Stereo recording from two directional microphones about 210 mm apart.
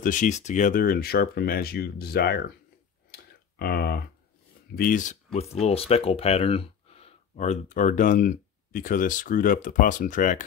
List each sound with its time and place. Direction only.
0.0 s speech: 35° left (ahead or behind)
3.1 s a sound: 50° left (ahead or behind)
4.7 s speech: 40° left (ahead or behind)